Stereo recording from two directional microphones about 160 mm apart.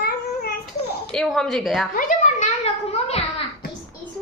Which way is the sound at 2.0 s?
55° left (ahead or behind).